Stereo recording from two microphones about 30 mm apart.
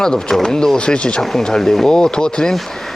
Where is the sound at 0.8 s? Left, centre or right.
Left.